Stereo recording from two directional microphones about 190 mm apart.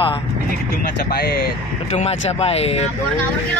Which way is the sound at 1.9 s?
35° left (ahead or behind).